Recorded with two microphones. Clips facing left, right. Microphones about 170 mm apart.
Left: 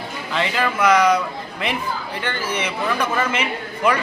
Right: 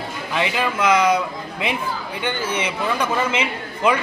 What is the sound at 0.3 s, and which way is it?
Speech, 15° right (ahead or behind).